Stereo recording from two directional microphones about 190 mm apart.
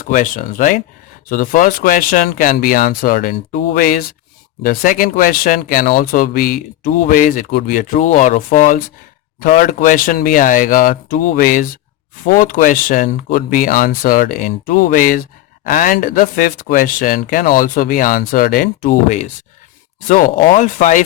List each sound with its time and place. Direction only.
0.0 s speech: 45° left (ahead or behind)